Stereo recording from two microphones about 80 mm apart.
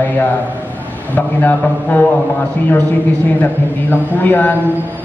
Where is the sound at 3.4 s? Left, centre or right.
Left.